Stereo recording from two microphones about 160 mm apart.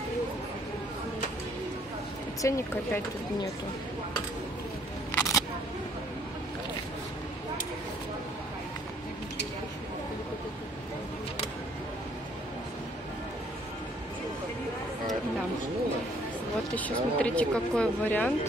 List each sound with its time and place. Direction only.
2.4 s speech: 15° left (ahead or behind)
5.1 s single-lens reflex camera: 20° left (ahead or behind)
16.7 s speech: 10° left (ahead or behind)